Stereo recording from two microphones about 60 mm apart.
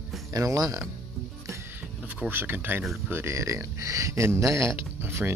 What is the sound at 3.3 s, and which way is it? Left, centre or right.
Speech, right.